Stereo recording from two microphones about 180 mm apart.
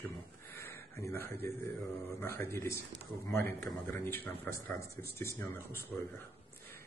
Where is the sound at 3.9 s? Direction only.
15° left (ahead or behind).